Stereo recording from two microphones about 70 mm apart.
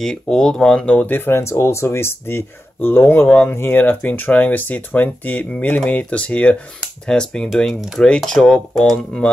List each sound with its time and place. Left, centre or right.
0.0 s speech: centre
0.9 s speech: left; by 8.9 s centre